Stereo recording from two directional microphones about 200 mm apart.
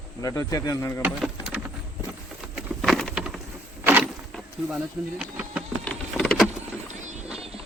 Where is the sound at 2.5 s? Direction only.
Centre (ahead or behind).